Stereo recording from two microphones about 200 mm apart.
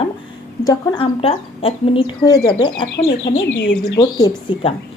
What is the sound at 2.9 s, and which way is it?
Speech, 65° left (ahead or behind).